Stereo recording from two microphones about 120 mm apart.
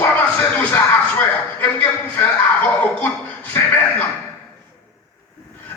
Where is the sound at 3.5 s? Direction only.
15° left (ahead or behind).